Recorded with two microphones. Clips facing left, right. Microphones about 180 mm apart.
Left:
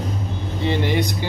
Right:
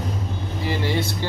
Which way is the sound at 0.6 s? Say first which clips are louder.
Left 4 dB; 20° left (ahead or behind).